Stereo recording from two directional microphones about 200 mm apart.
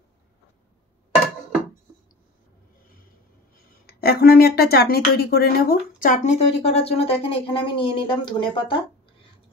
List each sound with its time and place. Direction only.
3.8 s speech: 50° left (ahead or behind); by 8.8 s 25° left (ahead or behind)